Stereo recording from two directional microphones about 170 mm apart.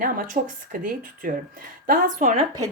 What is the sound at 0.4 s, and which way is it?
Speech, 40° right (ahead or behind).